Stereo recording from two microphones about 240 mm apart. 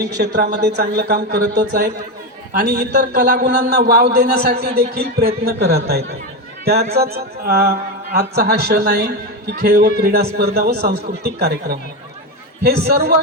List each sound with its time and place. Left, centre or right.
0.2 s speech: right